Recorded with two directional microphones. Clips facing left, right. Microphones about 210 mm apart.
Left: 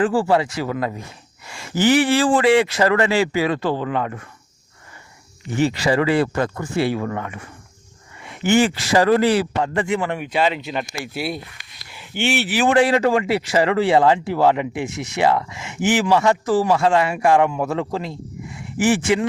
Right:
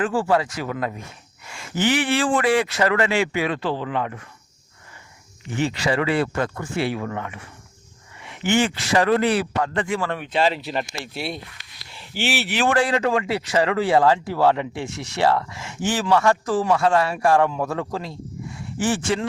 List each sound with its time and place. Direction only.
0.0 s speech: 30° left (ahead or behind)
1.5 s a sound: 30° left (ahead or behind)
1.8 s speech: 40° left (ahead or behind)
5.5 s speech: 35° left (ahead or behind); by 10.3 s 15° left (ahead or behind)
10.6 s speech: centre (ahead or behind)
12.6 s speech: 20° left (ahead or behind)